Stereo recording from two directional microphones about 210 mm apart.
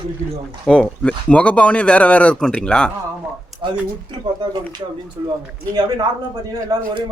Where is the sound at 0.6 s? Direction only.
5° left (ahead or behind).